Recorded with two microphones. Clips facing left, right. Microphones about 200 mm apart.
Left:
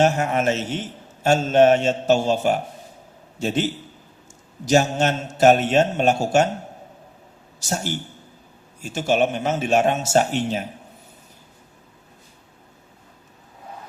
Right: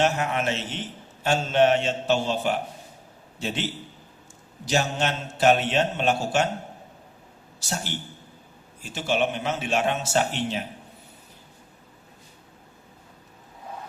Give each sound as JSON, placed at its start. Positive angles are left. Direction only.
{"t": 0.0, "sound": "a man's voice", "side_deg": 45}
{"t": 7.6, "sound": "a man's voice", "side_deg": 45}